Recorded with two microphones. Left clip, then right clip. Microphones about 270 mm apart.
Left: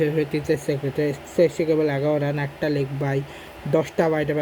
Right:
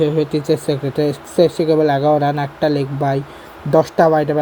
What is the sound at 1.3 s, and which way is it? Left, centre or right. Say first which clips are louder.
Speech: right 5 dB; right.